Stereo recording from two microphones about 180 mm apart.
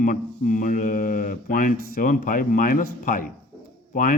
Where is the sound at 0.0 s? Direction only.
50° left (ahead or behind).